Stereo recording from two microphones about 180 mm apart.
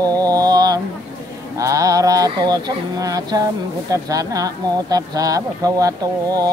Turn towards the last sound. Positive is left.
turn(degrees=-20)  # may be behind; listen again after turning